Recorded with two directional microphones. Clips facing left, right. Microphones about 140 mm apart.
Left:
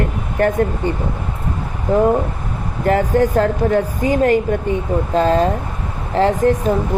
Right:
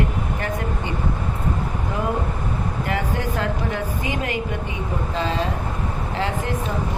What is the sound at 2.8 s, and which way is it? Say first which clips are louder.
A woman's voice: left 13 dB; 45° left (ahead or behind).